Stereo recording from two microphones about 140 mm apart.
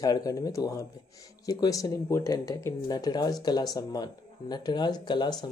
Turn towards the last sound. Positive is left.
turn(degrees=30)  # may be behind; listen again after turning